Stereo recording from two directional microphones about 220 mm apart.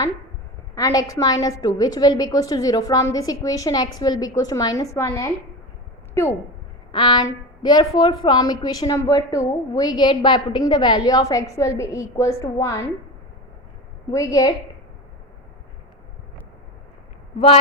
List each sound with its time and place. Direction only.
0.8 s a woman's voice: 15° left (ahead or behind)
14.1 s a woman's voice: 15° left (ahead or behind)